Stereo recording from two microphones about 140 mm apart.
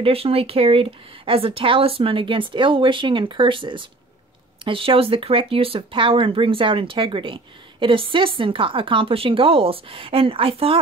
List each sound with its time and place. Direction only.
0.0 s speech: 45° right (ahead or behind)